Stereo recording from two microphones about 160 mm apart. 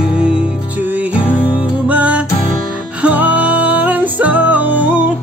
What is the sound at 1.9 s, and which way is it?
Music, 10° right (ahead or behind).